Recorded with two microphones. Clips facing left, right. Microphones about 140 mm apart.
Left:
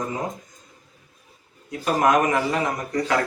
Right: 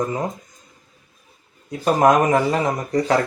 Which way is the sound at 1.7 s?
35° right (ahead or behind).